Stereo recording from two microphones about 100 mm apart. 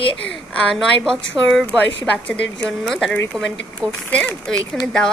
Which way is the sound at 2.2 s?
10° left (ahead or behind).